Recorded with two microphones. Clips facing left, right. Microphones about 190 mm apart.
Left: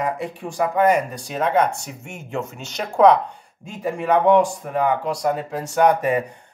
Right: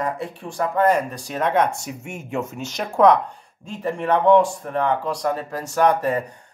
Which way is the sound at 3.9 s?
10° left (ahead or behind).